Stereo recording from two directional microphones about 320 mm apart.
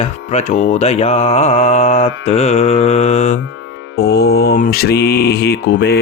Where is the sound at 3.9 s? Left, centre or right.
Left.